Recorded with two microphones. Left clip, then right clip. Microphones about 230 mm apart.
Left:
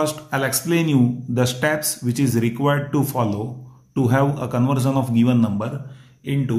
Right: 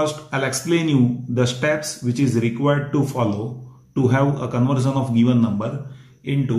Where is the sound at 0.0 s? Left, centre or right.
Left.